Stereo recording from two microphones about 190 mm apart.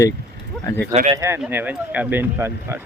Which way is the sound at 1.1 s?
15° right (ahead or behind).